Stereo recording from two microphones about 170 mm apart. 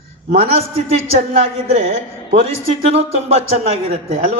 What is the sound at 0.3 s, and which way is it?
A man's voice, 40° right (ahead or behind).